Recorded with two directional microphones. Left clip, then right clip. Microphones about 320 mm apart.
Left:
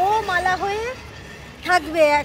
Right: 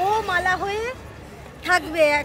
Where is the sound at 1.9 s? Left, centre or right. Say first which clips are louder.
Left 3 dB; centre.